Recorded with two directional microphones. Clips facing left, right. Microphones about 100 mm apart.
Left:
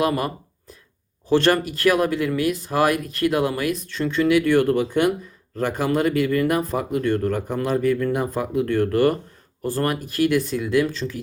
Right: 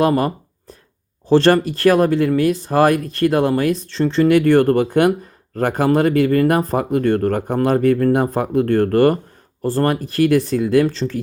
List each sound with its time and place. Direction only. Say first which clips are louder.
0.0 s a sound: right 6 dB; 35° right (ahead or behind)
1.3 s speech: right 5 dB; 35° right (ahead or behind)
4.3 s speech: right 4 dB; 50° right (ahead or behind)
9.6 s speech: right 5 dB; 30° right (ahead or behind)